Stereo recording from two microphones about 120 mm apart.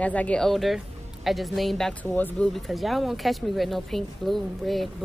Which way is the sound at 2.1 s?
15° left (ahead or behind).